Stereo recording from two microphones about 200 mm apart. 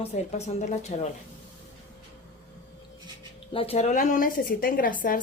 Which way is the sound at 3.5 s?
30° left (ahead or behind).